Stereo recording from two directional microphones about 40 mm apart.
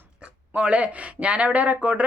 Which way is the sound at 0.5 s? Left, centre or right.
Right.